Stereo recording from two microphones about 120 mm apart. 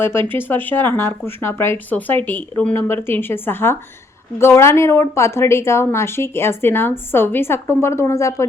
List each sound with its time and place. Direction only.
0.0 s a woman's voice: 20° left (ahead or behind)